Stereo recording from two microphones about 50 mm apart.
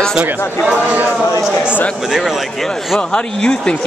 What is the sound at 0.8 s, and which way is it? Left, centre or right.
Speech, right.